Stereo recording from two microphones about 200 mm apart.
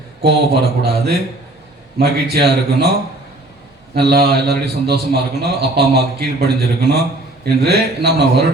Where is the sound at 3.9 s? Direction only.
55° right (ahead or behind).